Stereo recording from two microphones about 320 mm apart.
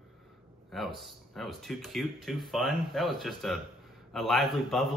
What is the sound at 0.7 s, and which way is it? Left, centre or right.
Speech, centre.